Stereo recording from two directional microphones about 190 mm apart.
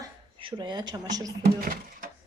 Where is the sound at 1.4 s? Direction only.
50° right (ahead or behind).